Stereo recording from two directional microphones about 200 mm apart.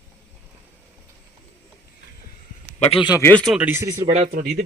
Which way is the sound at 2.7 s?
30° left (ahead or behind).